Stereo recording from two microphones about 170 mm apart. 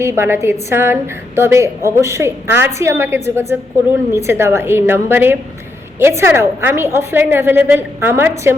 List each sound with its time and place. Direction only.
0.0 s a woman's voice: 15° right (ahead or behind)